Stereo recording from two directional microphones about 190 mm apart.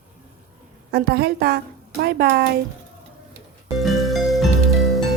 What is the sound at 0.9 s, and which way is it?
A woman's voice, 55° right (ahead or behind).